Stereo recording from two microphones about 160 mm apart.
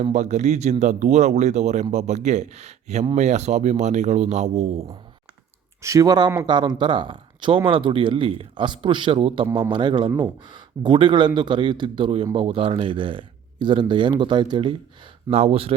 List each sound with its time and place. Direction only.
0.0 s speech: 45° right (ahead or behind)
5.8 s speech: 20° right (ahead or behind); by 15.7 s 40° right (ahead or behind)